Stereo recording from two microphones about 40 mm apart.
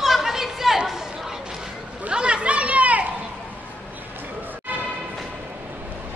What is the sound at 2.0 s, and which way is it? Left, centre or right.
Chatter, right.